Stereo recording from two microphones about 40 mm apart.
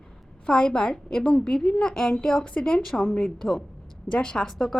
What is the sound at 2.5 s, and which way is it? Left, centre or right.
Speech, left.